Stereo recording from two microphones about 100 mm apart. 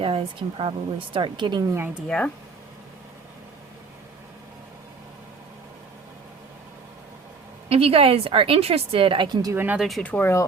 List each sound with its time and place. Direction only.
0.0 s speech: 65° right (ahead or behind); by 1.6 s 50° right (ahead or behind)
2.0 s speech: 10° left (ahead or behind)
7.7 s a woman's voice: 75° right (ahead or behind); by 9.6 s 40° right (ahead or behind)
9.7 s speech: centre (ahead or behind)
10.0 s speech: 15° left (ahead or behind)